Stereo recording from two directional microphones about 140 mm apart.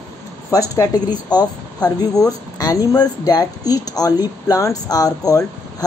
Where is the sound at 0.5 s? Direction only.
25° left (ahead or behind).